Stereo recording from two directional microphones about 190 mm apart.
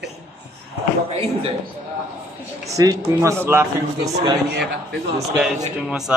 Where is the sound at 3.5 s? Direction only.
10° right (ahead or behind).